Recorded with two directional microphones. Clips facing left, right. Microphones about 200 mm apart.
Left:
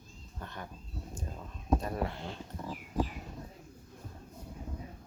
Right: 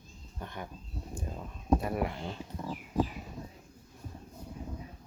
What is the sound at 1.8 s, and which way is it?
Speech, 15° right (ahead or behind).